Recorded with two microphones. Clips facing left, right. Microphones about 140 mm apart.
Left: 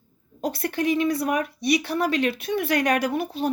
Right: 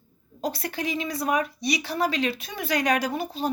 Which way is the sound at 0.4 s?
55° left (ahead or behind).